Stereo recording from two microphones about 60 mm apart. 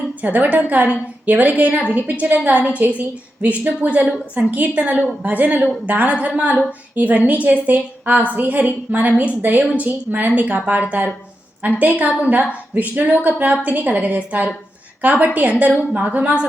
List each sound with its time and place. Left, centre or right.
0.2 s a woman's voice: right